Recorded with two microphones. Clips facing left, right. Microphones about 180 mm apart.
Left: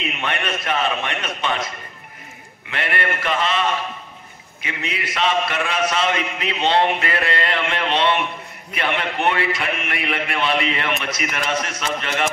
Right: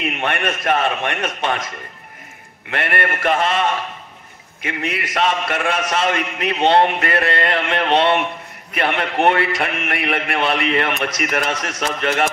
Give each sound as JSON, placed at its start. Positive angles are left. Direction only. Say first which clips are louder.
{"t": 0.0, "sound": "a man's voice", "louder": "right 4 dB", "side_deg": -50}
{"t": 2.7, "sound": "a man's voice", "louder": "right 3 dB", "side_deg": -50}
{"t": 4.6, "sound": "a man's voice", "louder": "right 4 dB", "side_deg": -50}